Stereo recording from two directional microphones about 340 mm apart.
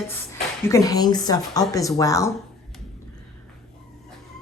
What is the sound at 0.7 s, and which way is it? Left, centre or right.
A woman's voice, centre.